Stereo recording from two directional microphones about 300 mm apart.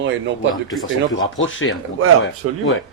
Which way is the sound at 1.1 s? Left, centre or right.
Left.